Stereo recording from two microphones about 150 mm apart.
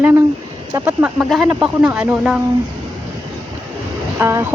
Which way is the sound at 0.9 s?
5° right (ahead or behind).